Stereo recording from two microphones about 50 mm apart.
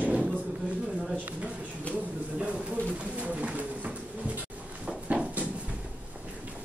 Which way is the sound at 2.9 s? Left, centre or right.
Right.